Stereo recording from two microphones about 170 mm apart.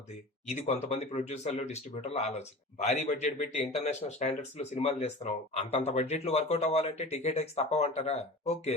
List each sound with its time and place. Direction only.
0.4 s speech: 40° left (ahead or behind)